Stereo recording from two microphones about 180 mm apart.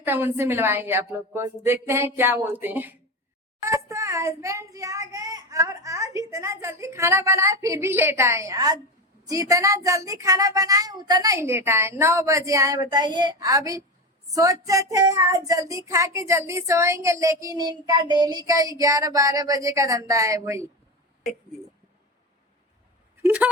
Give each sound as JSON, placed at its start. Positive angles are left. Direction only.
{"t": 0.0, "sound": "a child's voice", "side_deg": -10}
{"t": 23.2, "sound": "speech", "side_deg": -10}